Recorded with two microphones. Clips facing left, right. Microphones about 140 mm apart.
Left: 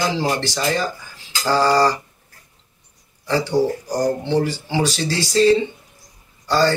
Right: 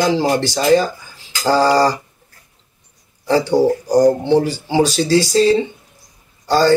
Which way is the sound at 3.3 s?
45° right (ahead or behind).